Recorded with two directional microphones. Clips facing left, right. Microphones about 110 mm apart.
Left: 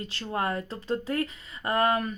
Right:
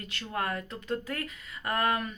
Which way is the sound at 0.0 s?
30° left (ahead or behind).